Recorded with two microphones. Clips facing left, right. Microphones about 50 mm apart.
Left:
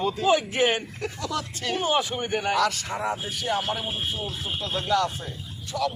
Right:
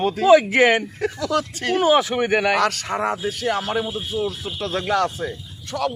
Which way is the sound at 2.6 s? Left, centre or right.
Right.